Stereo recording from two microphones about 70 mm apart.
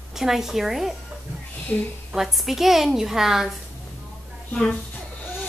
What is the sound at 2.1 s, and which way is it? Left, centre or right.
A woman's voice, centre.